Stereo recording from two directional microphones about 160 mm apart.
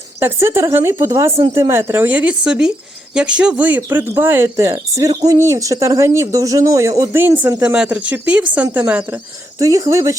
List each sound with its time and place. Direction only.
0.2 s speech: 15° right (ahead or behind)
9.6 s speech: 20° right (ahead or behind)